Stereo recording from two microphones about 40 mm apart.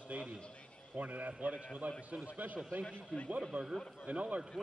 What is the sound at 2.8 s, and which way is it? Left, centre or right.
Speech, left.